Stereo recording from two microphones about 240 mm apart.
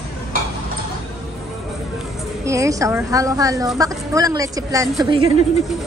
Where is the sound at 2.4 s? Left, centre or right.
Centre.